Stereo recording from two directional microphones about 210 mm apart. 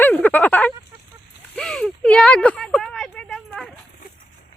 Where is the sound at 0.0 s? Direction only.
10° left (ahead or behind).